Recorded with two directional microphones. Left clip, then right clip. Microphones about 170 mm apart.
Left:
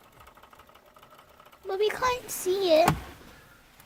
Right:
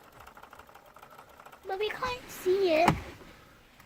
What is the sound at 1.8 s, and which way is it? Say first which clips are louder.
Speech: left 8 dB; 45° left (ahead or behind).